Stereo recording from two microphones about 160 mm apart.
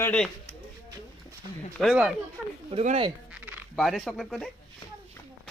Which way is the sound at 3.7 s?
Centre (ahead or behind).